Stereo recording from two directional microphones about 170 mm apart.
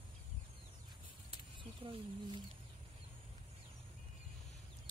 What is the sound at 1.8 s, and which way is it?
Speech, 30° right (ahead or behind).